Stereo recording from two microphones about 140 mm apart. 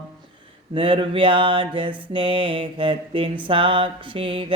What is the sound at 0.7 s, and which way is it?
Mantra, 35° right (ahead or behind).